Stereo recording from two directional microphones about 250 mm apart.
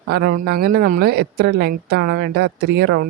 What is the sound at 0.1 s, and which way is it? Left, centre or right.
Speech, right.